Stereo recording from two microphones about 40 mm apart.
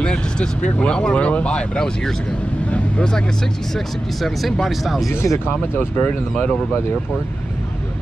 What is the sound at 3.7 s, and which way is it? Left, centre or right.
Speech, centre.